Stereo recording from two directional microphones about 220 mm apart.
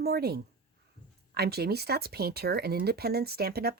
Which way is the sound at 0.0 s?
45° right (ahead or behind).